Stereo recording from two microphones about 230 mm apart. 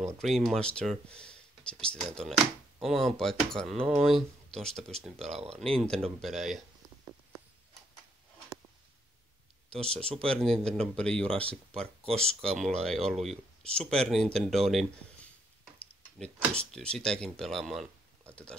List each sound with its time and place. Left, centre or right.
0.2 s speech: centre
9.7 s speech: centre
18.3 s a sound: centre